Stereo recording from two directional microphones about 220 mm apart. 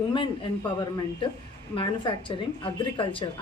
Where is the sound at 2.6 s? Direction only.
25° left (ahead or behind).